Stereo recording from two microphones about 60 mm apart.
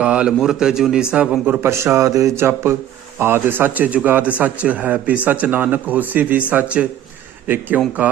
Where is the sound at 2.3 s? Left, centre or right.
Right.